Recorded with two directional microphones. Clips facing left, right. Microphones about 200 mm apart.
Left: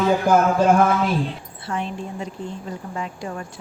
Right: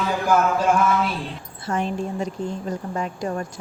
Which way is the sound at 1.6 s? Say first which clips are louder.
Right 3 dB; 40° right (ahead or behind).